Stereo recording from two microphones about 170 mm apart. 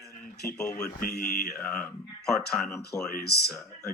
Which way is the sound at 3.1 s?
70° left (ahead or behind).